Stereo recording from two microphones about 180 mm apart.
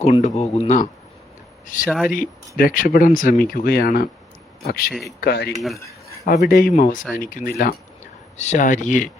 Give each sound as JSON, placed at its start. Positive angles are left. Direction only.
{"t": 0.0, "sound": "speech", "side_deg": 40}
{"t": 1.6, "sound": "speech", "side_deg": 50}
{"t": 4.9, "sound": "speech", "side_deg": 0}
{"t": 5.2, "sound": "speech", "side_deg": 65}
{"t": 5.5, "sound": "speech", "side_deg": 0}
{"t": 6.2, "sound": "speech", "side_deg": 50}
{"t": 8.4, "sound": "speech", "side_deg": 40}